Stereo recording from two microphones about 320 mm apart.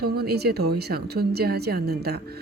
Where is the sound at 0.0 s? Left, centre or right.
Right.